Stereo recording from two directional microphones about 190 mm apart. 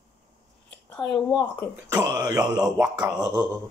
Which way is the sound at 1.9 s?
15° right (ahead or behind).